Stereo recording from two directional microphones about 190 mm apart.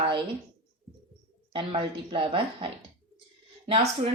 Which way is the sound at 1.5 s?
25° right (ahead or behind).